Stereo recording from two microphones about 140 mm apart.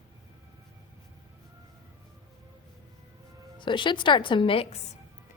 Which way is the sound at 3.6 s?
35° left (ahead or behind).